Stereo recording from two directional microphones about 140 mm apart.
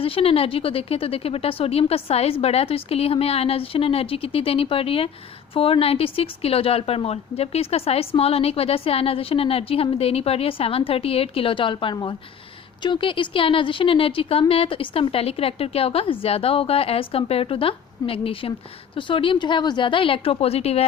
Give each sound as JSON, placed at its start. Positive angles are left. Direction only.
{"t": 0.0, "sound": "a woman's voice", "side_deg": 40}